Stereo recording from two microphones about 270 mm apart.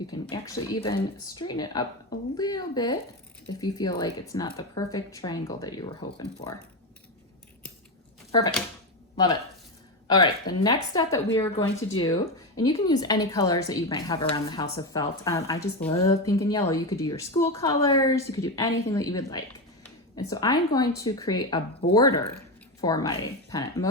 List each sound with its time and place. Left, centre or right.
0.1 s a woman's voice: centre
8.3 s a woman's voice: centre